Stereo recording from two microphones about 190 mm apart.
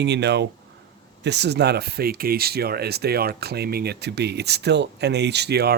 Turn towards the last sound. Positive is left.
turn(degrees=-55)  # may be behind; listen again after turning